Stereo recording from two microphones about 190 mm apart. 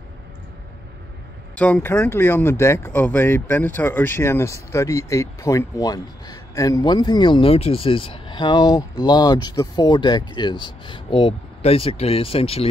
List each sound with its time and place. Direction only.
1.6 s speech: 10° left (ahead or behind); by 12.6 s 30° left (ahead or behind)